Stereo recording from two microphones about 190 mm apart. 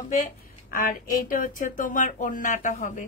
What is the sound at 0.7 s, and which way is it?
A woman's voice, 45° left (ahead or behind).